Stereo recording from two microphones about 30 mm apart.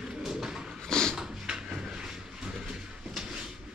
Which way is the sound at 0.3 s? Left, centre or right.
Centre.